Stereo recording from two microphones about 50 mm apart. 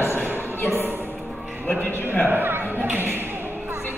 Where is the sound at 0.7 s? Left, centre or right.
Right.